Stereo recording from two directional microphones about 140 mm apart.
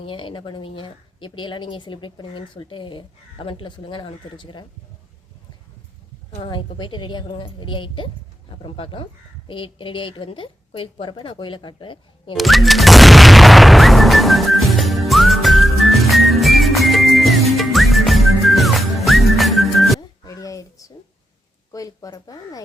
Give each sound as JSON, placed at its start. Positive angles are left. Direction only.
{"t": 0.0, "sound": "a woman's voice", "side_deg": 40}
{"t": 6.3, "sound": "a woman's voice", "side_deg": 40}
{"t": 12.4, "sound": "boom", "side_deg": 0}
{"t": 20.0, "sound": "a sound", "side_deg": 25}
{"t": 21.7, "sound": "speech", "side_deg": 25}